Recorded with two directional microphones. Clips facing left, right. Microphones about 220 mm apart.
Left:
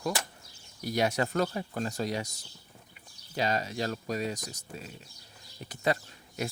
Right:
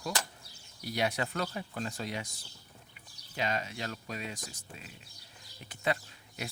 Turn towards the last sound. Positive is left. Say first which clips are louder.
# left 7 dB
turn(degrees=40)  # may be behind; listen again after turning